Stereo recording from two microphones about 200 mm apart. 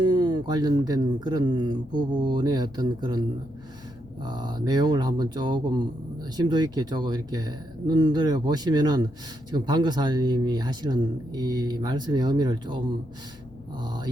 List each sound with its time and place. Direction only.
0.0 s speech: 20° right (ahead or behind)